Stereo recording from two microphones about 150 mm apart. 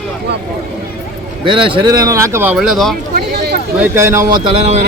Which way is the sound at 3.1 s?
90° right.